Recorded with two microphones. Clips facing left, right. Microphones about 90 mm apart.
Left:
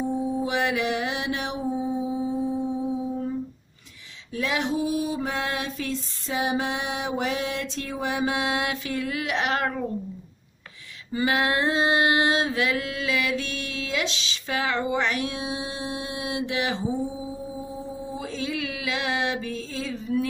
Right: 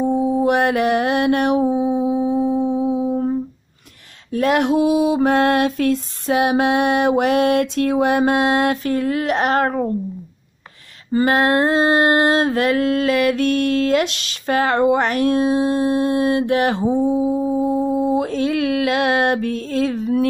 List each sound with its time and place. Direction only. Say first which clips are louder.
0.1 s mantra: right 9 dB; 60° right (ahead or behind)
4.3 s mantra: right 10 dB; 55° right (ahead or behind)
11.1 s female singing: right 8 dB; 45° right (ahead or behind); by 20.2 s 65° right (ahead or behind)